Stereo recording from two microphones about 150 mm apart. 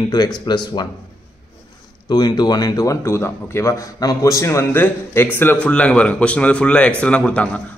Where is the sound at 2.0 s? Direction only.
30° left (ahead or behind).